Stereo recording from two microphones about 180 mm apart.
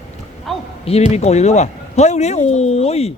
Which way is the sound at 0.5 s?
Centre (ahead or behind).